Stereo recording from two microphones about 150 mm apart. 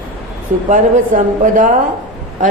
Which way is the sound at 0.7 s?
60° right (ahead or behind).